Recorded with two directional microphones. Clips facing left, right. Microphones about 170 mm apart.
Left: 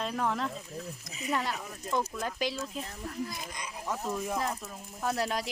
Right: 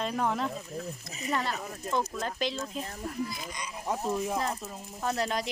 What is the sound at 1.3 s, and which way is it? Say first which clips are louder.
Speech: right 1 dB; 10° left (ahead or behind).